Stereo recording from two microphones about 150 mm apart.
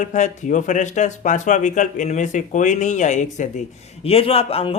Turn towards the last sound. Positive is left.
turn(degrees=40)  # may be behind; listen again after turning